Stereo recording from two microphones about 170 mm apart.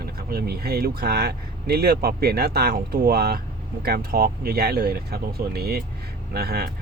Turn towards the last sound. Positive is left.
turn(degrees=-65)  # may be behind; listen again after turning